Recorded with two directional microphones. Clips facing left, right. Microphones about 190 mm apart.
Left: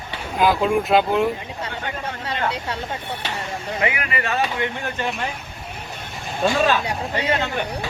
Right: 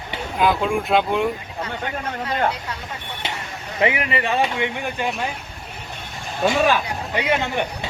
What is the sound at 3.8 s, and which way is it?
Speech, 25° right (ahead or behind).